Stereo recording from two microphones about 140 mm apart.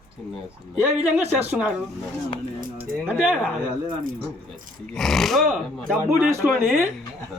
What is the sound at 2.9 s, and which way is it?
Speech, 10° left (ahead or behind).